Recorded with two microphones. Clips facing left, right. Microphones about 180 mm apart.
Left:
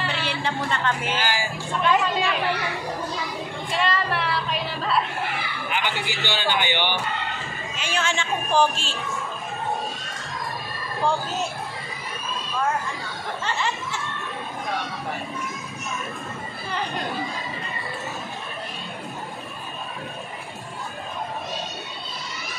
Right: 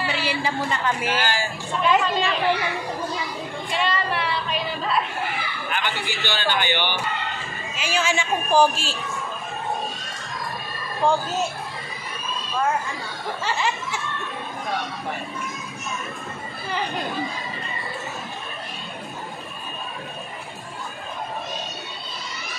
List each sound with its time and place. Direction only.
0.0 s speech: 5° right (ahead or behind)
1.2 s a man's voice: 15° left (ahead or behind)
1.8 s speech: centre (ahead or behind)
3.7 s speech: centre (ahead or behind)
5.7 s a man's voice: 15° left (ahead or behind)
7.7 s speech: 5° right (ahead or behind)